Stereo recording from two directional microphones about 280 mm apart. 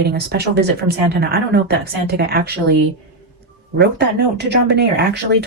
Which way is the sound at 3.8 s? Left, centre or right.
Right.